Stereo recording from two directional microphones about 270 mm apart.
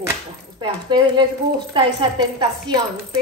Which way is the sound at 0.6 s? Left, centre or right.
Centre.